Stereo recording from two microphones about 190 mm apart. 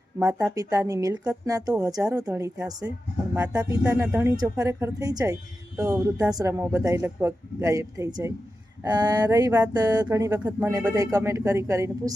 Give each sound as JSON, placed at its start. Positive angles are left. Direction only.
{"t": 0.5, "sound": "a woman's voice", "side_deg": -20}